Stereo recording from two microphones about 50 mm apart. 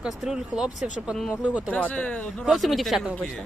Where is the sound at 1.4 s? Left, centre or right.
Right.